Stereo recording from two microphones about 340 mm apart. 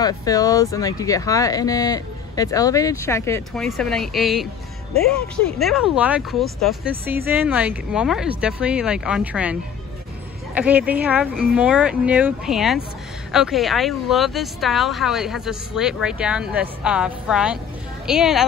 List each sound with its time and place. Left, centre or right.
0.0 s speech: centre
5.6 s speech: centre